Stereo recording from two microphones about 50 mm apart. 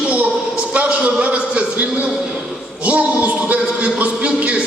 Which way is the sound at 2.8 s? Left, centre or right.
Right.